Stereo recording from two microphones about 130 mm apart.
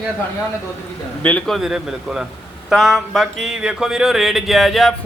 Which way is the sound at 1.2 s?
5° left (ahead or behind).